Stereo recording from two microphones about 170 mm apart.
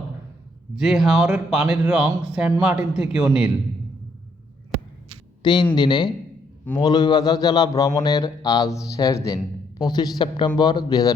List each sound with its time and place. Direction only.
0.8 s speech: centre (ahead or behind)
5.4 s a man's voice: 25° left (ahead or behind)